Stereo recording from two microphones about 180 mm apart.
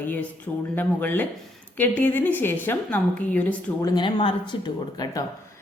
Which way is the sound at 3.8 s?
20° left (ahead or behind).